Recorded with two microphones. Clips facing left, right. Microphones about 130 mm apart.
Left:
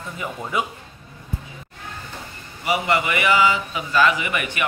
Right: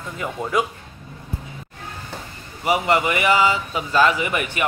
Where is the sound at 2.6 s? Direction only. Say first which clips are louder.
Right 2 dB; 40° right (ahead or behind).